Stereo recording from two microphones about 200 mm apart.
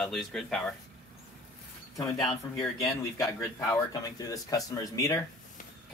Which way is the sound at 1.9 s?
15° left (ahead or behind).